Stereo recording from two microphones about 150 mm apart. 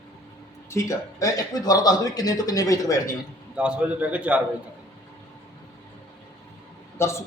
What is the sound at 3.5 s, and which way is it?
Speech, 5° right (ahead or behind).